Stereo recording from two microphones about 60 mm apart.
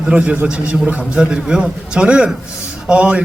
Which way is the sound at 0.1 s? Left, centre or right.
Centre.